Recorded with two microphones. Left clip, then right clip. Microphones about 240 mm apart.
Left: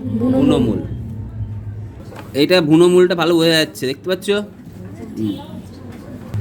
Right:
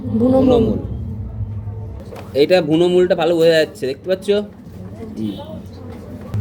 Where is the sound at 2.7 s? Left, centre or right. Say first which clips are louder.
Left 2 dB; left.